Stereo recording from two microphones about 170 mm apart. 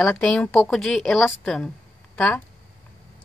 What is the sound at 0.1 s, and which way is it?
A woman's voice, 5° left (ahead or behind).